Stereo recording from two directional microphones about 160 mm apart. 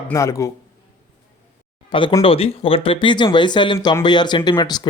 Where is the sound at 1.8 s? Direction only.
30° left (ahead or behind).